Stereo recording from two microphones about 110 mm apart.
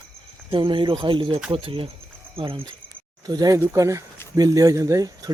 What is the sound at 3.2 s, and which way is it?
Speech, 35° right (ahead or behind).